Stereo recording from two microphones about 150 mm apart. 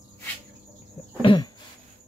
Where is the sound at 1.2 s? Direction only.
30° left (ahead or behind).